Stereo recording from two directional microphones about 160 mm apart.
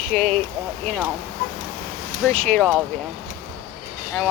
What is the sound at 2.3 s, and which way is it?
Speech, 5° left (ahead or behind).